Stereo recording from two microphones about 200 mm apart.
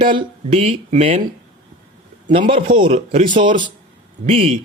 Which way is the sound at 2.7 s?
25° right (ahead or behind).